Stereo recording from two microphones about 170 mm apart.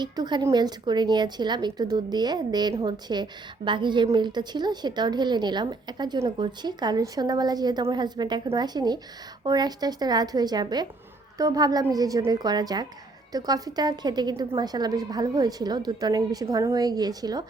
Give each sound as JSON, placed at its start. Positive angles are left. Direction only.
{"t": 0.0, "sound": "a woman's voice", "side_deg": -25}